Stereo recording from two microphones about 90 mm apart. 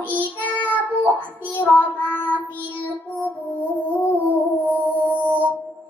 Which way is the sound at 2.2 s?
20° left (ahead or behind).